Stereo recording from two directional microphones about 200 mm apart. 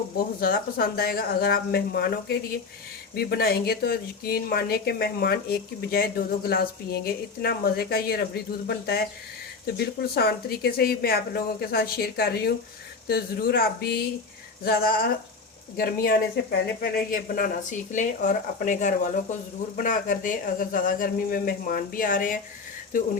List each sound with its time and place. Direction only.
0.3 s speech: 45° left (ahead or behind)